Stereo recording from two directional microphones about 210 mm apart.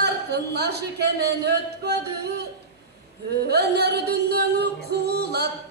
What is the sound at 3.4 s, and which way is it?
Music, 50° right (ahead or behind).